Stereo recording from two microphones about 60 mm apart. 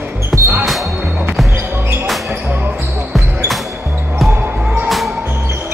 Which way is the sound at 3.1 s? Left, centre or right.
Centre.